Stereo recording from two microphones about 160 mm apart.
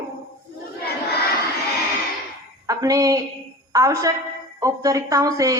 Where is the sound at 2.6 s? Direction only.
20° right (ahead or behind).